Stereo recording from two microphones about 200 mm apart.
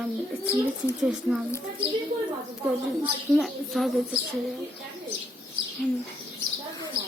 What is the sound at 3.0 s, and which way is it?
A woman's voice, centre (ahead or behind).